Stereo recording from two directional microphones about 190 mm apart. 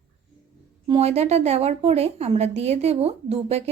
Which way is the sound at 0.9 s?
35° right (ahead or behind).